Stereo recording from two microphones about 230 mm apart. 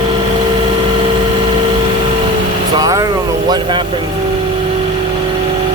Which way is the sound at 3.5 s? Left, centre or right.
Centre.